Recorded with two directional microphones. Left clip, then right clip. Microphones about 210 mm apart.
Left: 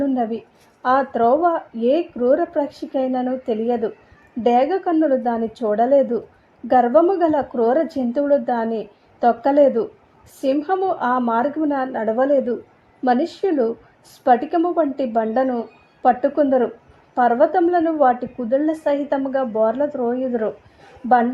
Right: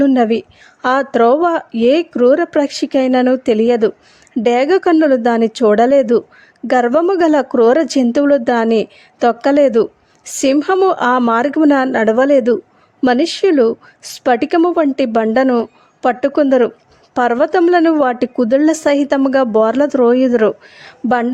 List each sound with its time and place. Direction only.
0.0 s speech: 30° right (ahead or behind)